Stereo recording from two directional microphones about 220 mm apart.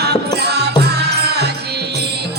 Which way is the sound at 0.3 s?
50° right (ahead or behind).